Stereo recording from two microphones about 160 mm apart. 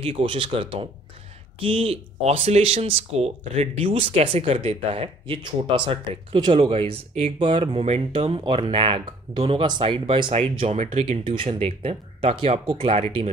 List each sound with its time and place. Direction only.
0.0 s speech: 35° right (ahead or behind)